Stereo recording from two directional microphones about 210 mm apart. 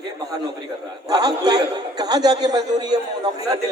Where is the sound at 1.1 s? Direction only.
20° right (ahead or behind).